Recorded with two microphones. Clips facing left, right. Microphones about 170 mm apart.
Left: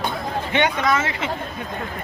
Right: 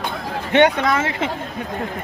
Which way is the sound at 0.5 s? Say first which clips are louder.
Right 5 dB; 60° right (ahead or behind).